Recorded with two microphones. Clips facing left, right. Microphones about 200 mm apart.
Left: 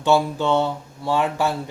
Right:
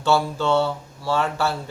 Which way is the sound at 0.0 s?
15° left (ahead or behind).